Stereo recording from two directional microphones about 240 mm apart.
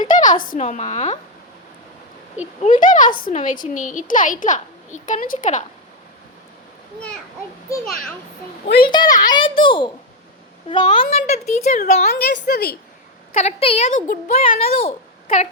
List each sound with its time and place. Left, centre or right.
0.0 s a sound: left
0.4 s speech: left
2.6 s a woman's voice: left
8.6 s a woman's voice: left
8.9 s a child's voice: centre; by 12.7 s left
13.3 s speech: left